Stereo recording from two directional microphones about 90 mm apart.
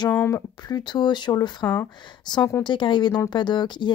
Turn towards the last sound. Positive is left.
turn(degrees=60)  # may be behind; listen again after turning